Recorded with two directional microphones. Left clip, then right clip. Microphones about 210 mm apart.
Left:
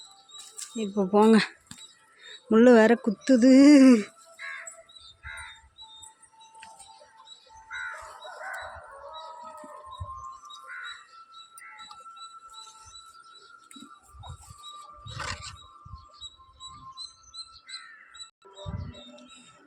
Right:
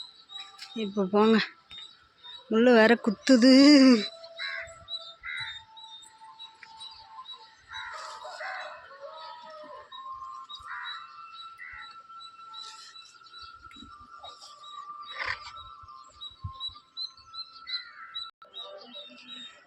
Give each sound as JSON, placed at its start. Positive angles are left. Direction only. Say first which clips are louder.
{"t": 0.8, "sound": "speech", "louder": "left 3 dB", "side_deg": 20}
{"t": 5.2, "sound": "bird", "louder": "right 4 dB", "side_deg": 40}